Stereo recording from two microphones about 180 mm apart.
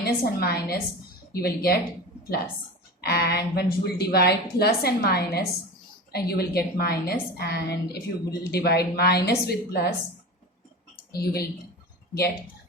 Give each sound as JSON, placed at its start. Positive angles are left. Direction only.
{"t": 0.0, "sound": "a woman's voice", "side_deg": 60}
{"t": 3.0, "sound": "a woman's voice", "side_deg": 65}
{"t": 11.1, "sound": "a woman's voice", "side_deg": 60}